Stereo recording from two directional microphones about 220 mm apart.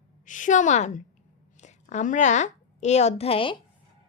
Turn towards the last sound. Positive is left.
turn(degrees=25)  # may be behind; listen again after turning